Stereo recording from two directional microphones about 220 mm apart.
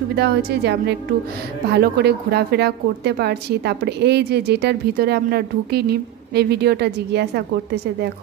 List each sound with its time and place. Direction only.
0.1 s a woman's voice: 50° right (ahead or behind)